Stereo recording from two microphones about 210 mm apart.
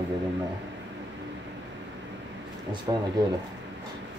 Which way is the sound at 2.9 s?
20° right (ahead or behind).